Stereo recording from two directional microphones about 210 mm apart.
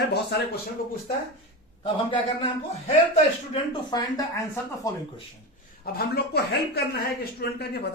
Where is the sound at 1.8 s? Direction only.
25° left (ahead or behind).